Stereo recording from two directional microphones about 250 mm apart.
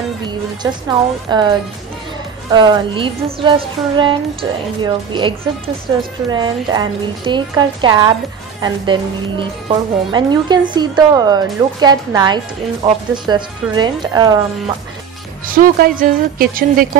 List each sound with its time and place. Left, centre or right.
0.6 s a woman's voice: centre
15.4 s a woman's voice: right